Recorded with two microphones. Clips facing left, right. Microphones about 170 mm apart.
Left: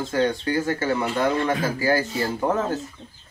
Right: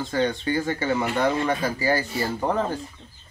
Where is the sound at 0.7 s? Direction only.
15° right (ahead or behind).